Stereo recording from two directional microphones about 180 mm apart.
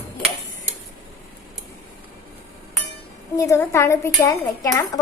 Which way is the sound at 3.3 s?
15° left (ahead or behind).